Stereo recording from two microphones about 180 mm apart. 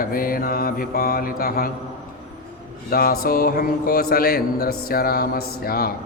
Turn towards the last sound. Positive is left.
turn(degrees=55)  # may be behind; listen again after turning